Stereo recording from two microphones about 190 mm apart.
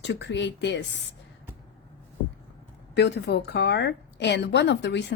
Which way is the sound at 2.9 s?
60° left (ahead or behind).